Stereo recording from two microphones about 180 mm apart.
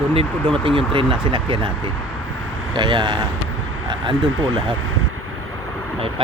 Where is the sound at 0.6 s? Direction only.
30° right (ahead or behind).